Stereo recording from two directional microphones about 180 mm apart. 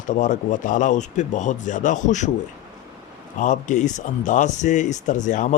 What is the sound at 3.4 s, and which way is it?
Speech, 45° left (ahead or behind).